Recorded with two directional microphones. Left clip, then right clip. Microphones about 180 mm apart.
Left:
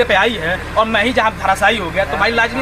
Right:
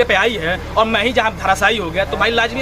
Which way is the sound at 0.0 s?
30° right (ahead or behind).